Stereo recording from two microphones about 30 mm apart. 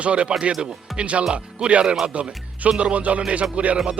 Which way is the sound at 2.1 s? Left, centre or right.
Right.